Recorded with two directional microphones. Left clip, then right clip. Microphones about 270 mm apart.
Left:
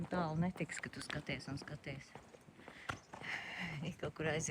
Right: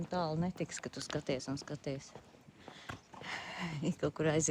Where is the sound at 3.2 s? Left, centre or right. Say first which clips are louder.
Right 4 dB; right.